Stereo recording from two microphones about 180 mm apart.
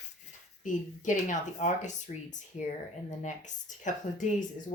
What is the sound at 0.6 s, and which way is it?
Speech, 45° left (ahead or behind).